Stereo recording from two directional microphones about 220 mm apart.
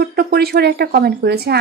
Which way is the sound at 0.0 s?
45° right (ahead or behind).